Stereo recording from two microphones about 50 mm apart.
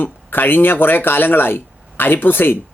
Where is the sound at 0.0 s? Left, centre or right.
Left.